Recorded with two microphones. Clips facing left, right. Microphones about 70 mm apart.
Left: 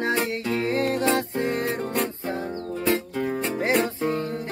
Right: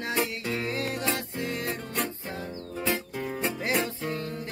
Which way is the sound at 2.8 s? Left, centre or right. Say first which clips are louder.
Left 6 dB; left.